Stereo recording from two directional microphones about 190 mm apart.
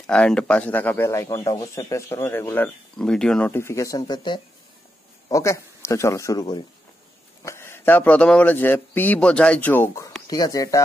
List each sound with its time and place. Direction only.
0.0 s speech: 5° left (ahead or behind)